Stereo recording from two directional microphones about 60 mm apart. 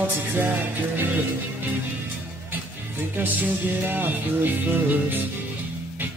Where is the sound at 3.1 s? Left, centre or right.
Right.